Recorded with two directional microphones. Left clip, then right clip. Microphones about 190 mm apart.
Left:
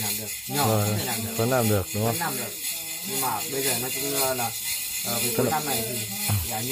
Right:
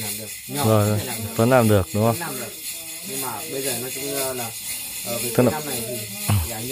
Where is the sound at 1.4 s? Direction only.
40° right (ahead or behind).